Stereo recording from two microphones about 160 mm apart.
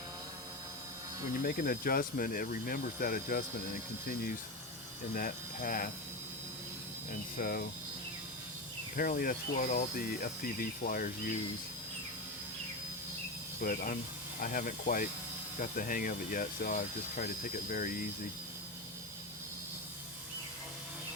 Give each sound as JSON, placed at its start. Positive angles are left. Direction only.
{"t": 1.4, "sound": "speech", "side_deg": 60}
{"t": 5.1, "sound": "speech", "side_deg": 60}
{"t": 7.3, "sound": "speech", "side_deg": 65}
{"t": 9.0, "sound": "speech", "side_deg": 60}
{"t": 13.6, "sound": "speech", "side_deg": 60}